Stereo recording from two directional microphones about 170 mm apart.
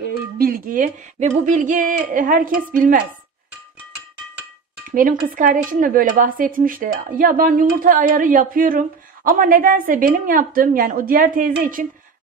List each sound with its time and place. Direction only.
0.4 s speech: 55° right (ahead or behind)
5.3 s speech: 50° right (ahead or behind)